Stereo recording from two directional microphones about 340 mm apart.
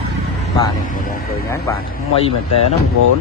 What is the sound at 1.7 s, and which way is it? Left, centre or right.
Speech, centre.